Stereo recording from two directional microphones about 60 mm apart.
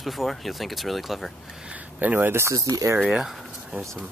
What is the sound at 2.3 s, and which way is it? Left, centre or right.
Speech, right.